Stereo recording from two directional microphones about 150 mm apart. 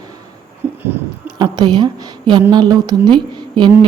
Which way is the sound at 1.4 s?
30° right (ahead or behind).